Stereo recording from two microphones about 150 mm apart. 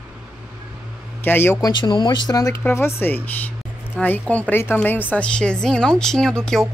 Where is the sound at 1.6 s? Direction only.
30° left (ahead or behind).